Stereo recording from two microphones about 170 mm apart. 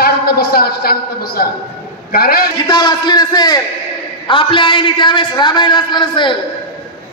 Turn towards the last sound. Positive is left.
turn(degrees=25)  # may be behind; listen again after turning